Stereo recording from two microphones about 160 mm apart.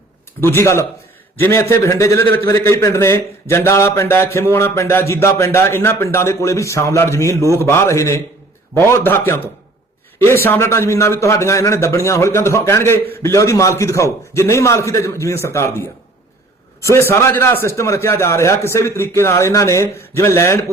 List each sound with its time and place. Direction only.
0.4 s a man's voice: 15° left (ahead or behind)
16.9 s a man's voice: 15° left (ahead or behind)